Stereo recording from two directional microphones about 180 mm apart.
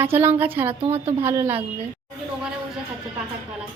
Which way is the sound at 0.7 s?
35° right (ahead or behind).